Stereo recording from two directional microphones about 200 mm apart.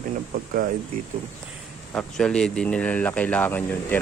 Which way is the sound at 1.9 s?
5° left (ahead or behind).